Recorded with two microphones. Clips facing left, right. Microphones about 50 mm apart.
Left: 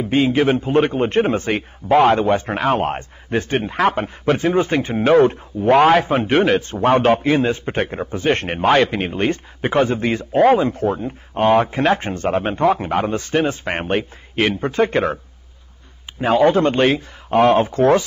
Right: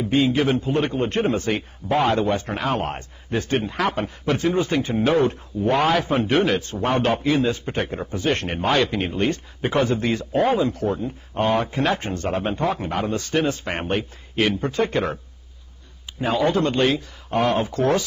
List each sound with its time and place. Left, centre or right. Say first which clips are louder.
0.0 s speech: left 3 dB; left
1.9 s speech: left 7 dB; left
2.1 s speech: left 4 dB; left
16.2 s speech: left 6 dB; left